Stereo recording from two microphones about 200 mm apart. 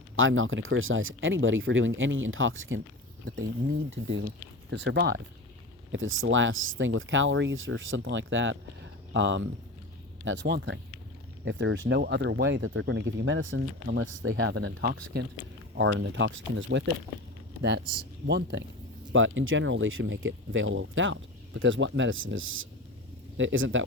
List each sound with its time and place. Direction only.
0.2 s speech: 80° right
3.2 s speech: 40° right (ahead or behind)
4.7 s speech: 65° right (ahead or behind)
5.9 s speech: 80° right; by 15.2 s 55° right (ahead or behind)
15.8 s speech: 80° right; by 18.6 s 55° right (ahead or behind)
19.1 s speech: 75° right (ahead or behind)